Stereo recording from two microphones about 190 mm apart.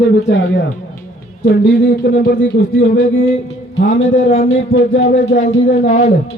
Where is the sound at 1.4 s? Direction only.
60° left (ahead or behind).